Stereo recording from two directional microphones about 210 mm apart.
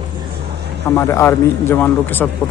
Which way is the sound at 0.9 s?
15° left (ahead or behind).